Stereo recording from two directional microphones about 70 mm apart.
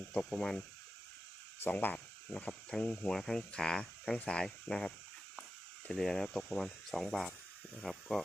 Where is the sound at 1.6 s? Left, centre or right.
Left.